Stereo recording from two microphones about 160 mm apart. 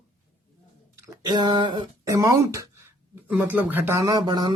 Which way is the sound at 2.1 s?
20° right (ahead or behind).